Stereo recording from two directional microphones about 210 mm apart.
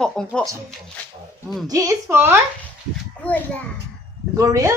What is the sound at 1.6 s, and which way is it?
Speech, 15° right (ahead or behind).